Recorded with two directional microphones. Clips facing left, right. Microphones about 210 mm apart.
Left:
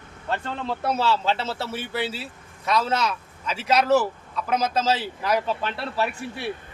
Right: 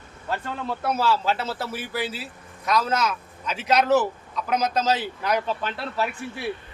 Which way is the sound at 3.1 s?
Centre (ahead or behind).